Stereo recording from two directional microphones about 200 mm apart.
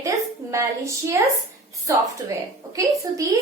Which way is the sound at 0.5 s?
15° right (ahead or behind).